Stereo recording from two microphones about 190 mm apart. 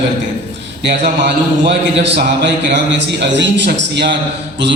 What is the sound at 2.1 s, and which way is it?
A man's voice, 65° right (ahead or behind).